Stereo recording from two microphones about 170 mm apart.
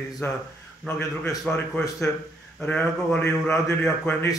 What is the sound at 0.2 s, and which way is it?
Speech, 15° left (ahead or behind).